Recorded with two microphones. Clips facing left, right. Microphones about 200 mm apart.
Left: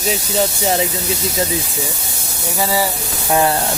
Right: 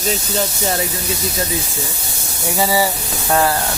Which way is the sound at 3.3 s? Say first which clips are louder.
Left 1 dB; 20° left (ahead or behind).